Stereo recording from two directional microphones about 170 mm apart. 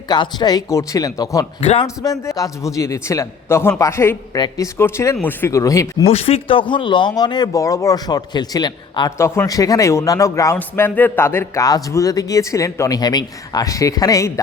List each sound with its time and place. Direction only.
0.1 s speech: 25° left (ahead or behind)
1.6 s a man's voice: 40° left (ahead or behind)
2.0 s a man's voice: 20° left (ahead or behind)
6.1 s speech: 35° left (ahead or behind); by 14.4 s 20° left (ahead or behind)